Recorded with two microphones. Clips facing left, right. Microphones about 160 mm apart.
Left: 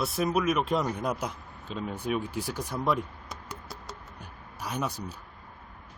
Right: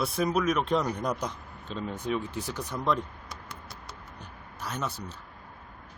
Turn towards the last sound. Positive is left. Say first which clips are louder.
# left 2 dB
turn(degrees=15)  # may be behind; listen again after turning